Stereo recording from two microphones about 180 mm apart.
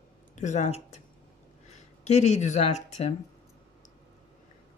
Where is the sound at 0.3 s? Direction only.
40° left (ahead or behind).